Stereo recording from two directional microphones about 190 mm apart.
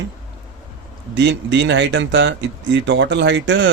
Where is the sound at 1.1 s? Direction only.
70° right (ahead or behind).